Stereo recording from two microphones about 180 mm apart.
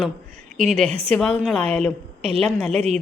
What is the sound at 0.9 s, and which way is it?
Speech, 35° right (ahead or behind).